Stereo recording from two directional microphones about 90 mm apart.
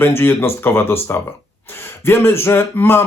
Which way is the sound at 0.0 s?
25° left (ahead or behind).